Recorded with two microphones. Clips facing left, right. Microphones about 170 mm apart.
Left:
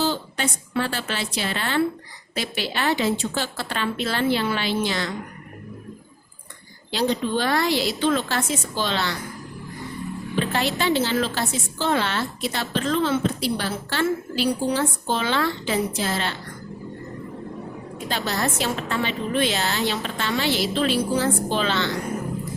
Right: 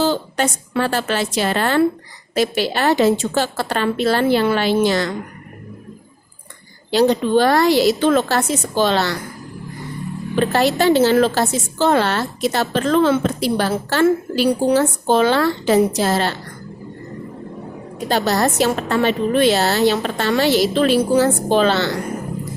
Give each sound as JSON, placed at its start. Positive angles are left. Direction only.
{"t": 0.0, "sound": "a sound", "side_deg": -45}
{"t": 0.8, "sound": "a woman's voice", "side_deg": -45}
{"t": 7.1, "sound": "a woman's voice", "side_deg": -45}
{"t": 10.3, "sound": "a woman's voice", "side_deg": -45}
{"t": 18.1, "sound": "a woman's voice", "side_deg": -40}